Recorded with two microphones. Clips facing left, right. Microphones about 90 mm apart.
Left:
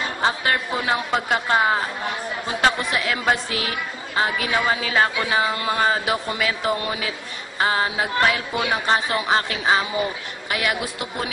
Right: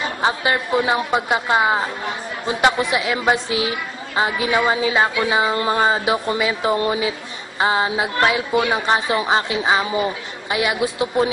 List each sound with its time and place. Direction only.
0.2 s a man's voice: 15° right (ahead or behind)